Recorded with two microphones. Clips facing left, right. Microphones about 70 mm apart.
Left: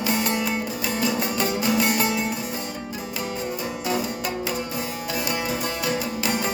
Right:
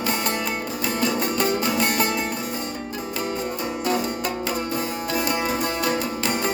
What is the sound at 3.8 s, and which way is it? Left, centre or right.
Music, centre.